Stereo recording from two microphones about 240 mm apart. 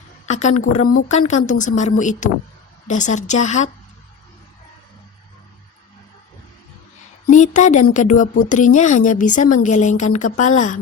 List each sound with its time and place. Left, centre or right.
0.3 s a woman's voice: left
7.3 s a woman's voice: left